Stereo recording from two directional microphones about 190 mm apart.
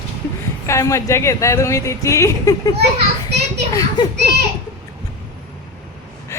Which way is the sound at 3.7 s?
20° left (ahead or behind).